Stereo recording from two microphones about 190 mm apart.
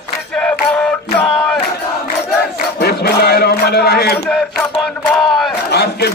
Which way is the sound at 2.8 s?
55° left (ahead or behind).